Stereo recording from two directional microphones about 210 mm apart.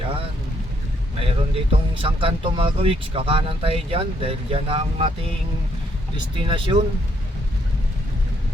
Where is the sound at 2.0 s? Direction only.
25° right (ahead or behind).